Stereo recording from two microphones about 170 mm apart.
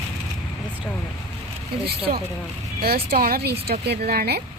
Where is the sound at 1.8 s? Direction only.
65° right (ahead or behind).